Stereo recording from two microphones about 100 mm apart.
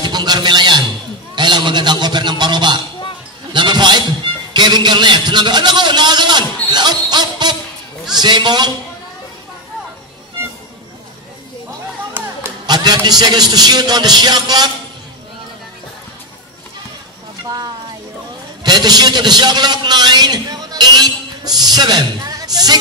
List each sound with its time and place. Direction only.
0.0 s a sound: 45° right (ahead or behind)
8.2 s a man's voice: 45° right (ahead or behind)
12.6 s a man's voice: 45° right (ahead or behind)
18.6 s a man's voice: 45° right (ahead or behind)